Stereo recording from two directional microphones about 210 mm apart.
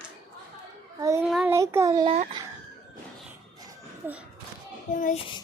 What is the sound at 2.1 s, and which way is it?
Speech, 25° right (ahead or behind).